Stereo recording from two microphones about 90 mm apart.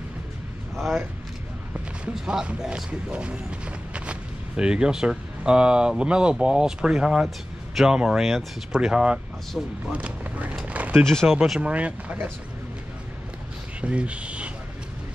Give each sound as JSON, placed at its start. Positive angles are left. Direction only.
{"t": 0.7, "sound": "speech", "side_deg": 0}
{"t": 2.1, "sound": "speech", "side_deg": -10}
{"t": 10.5, "sound": "a sound", "side_deg": -15}
{"t": 11.1, "sound": "speech", "side_deg": 5}
{"t": 11.6, "sound": "speech", "side_deg": -15}
{"t": 13.7, "sound": "speech", "side_deg": -15}